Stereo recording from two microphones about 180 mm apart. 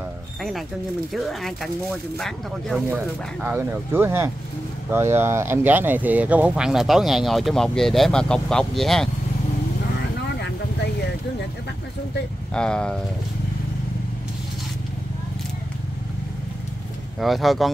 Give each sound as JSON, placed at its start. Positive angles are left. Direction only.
{"t": 0.4, "sound": "speech", "side_deg": 0}
{"t": 10.3, "sound": "vehicle", "side_deg": 70}
{"t": 12.5, "sound": "speech", "side_deg": 5}
{"t": 17.2, "sound": "speech", "side_deg": 0}